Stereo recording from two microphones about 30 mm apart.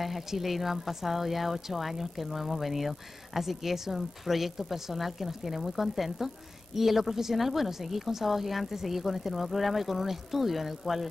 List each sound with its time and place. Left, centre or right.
0.3 s a woman's voice: centre